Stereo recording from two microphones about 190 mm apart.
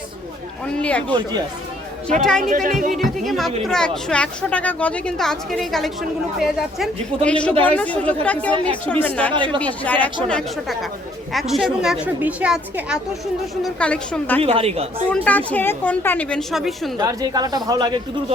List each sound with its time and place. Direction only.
0.6 s a woman's voice: 5° left (ahead or behind)
2.4 s speech: 45° right (ahead or behind)
2.9 s a woman's voice: centre (ahead or behind)
9.3 s a man's voice: 25° right (ahead or behind)
9.6 s a woman's voice: 10° left (ahead or behind)
13.7 s a woman's voice: 5° left (ahead or behind)
14.4 s a woman's voice: 30° right (ahead or behind)
15.1 s a woman's voice: 10° left (ahead or behind)
17.0 s a man's voice: 20° right (ahead or behind)